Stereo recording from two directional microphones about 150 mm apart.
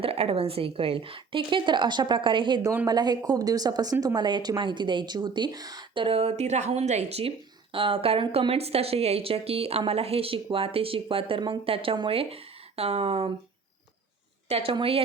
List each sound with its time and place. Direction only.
0.0 s a woman's voice: 40° right (ahead or behind)
14.5 s speech: 35° right (ahead or behind)